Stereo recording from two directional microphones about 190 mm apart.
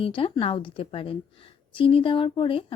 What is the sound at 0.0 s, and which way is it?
Speech, 30° left (ahead or behind).